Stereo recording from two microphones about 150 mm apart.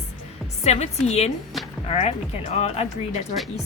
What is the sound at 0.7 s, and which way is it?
Speech, 45° left (ahead or behind).